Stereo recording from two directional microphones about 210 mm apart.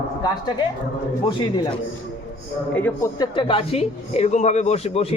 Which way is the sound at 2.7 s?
10° left (ahead or behind).